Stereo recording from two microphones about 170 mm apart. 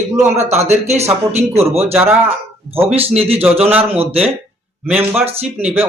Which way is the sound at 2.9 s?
35° right (ahead or behind).